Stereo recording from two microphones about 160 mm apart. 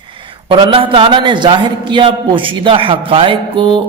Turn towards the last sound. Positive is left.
turn(degrees=-30)  # may be behind; listen again after turning